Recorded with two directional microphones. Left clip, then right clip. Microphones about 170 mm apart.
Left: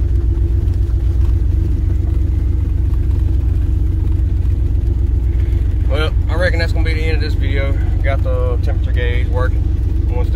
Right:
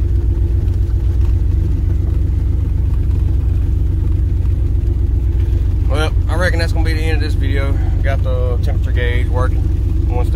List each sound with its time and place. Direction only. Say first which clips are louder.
5.9 s vehicle: even; 15° right (ahead or behind)
8.9 s speech: right 1 dB; 25° right (ahead or behind)